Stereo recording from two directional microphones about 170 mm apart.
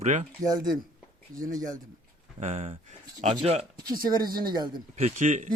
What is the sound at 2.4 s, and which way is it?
Speech, 40° right (ahead or behind).